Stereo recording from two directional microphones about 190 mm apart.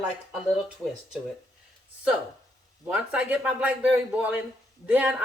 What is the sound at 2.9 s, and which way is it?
Speech, 5° right (ahead or behind).